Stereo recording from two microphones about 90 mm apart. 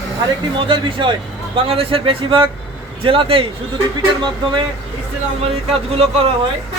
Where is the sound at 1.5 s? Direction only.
90° right.